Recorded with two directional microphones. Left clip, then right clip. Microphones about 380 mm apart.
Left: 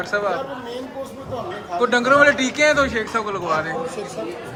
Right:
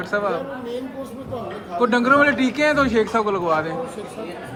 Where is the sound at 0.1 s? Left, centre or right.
Centre.